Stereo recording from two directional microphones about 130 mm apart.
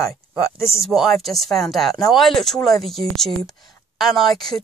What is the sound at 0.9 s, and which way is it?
Speech, centre (ahead or behind).